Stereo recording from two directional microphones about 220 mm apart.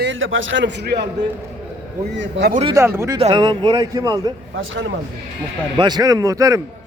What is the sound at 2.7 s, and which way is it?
Speech, 10° right (ahead or behind).